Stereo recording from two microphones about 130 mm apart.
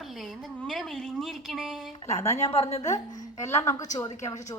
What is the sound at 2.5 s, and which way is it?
Speech, 55° left (ahead or behind).